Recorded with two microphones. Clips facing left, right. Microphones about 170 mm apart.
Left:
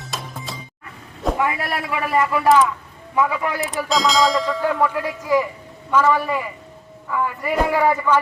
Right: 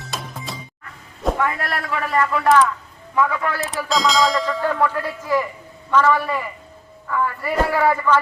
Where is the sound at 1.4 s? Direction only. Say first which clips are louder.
Left 1 dB; 5° left (ahead or behind).